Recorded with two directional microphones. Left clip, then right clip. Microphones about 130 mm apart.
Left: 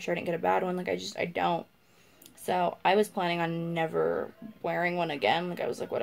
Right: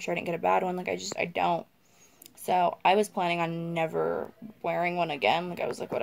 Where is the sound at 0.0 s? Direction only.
20° right (ahead or behind).